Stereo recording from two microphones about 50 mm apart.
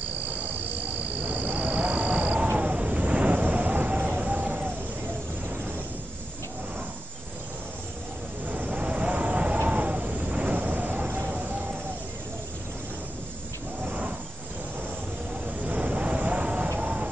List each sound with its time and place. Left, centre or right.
1.2 s cricket: right
2.6 s vehicle: right
8.5 s vehicle: right
11.2 s a sound: right
15.6 s vehicle: right